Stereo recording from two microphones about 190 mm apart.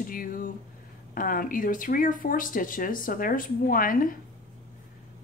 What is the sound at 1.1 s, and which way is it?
Speech, 45° left (ahead or behind).